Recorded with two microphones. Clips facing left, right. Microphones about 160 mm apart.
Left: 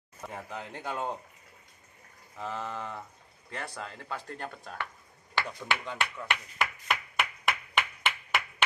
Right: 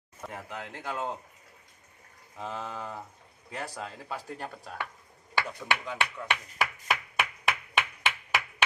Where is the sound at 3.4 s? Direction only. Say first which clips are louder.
Right 2 dB; 5° right (ahead or behind).